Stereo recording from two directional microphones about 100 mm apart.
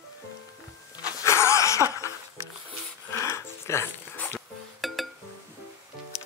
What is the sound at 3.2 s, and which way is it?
Music, 25° left (ahead or behind).